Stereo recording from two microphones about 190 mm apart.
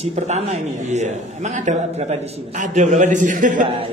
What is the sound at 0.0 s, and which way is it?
A man's voice, 35° right (ahead or behind).